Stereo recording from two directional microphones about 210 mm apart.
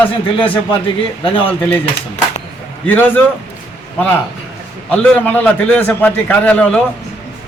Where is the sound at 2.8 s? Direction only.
10° left (ahead or behind).